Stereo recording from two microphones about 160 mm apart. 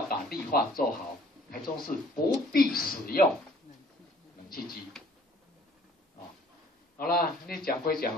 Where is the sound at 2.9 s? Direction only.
65° left (ahead or behind).